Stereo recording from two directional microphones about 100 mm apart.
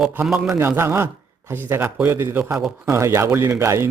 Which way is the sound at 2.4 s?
5° right (ahead or behind).